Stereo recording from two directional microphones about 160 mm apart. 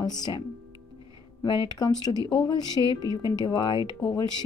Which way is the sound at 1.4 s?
25° left (ahead or behind).